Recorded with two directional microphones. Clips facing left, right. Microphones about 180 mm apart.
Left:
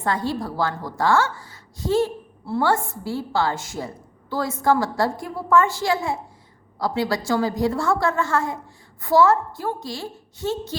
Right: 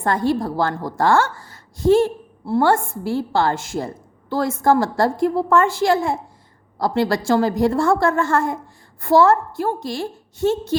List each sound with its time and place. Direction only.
0.0 s a woman's voice: 50° right (ahead or behind)